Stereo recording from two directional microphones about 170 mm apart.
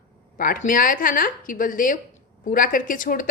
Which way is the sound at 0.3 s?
55° left (ahead or behind).